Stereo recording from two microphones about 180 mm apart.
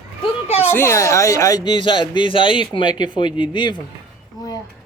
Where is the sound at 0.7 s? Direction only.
15° left (ahead or behind).